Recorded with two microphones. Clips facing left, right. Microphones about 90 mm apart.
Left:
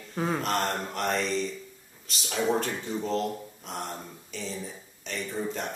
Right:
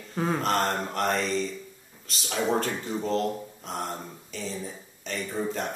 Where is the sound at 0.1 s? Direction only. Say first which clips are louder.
Right 2 dB; centre (ahead or behind).